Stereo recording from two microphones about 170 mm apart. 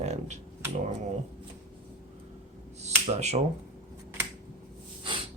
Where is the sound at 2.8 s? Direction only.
40° right (ahead or behind).